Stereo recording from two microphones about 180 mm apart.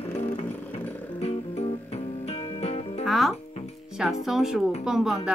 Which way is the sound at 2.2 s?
35° left (ahead or behind).